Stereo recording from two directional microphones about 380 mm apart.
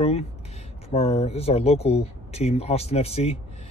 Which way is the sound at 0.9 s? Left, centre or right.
Centre.